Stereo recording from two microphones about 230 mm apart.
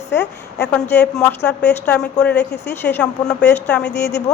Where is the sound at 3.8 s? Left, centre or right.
Left.